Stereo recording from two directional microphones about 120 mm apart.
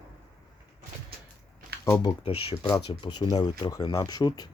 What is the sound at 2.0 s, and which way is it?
Speech, 50° left (ahead or behind).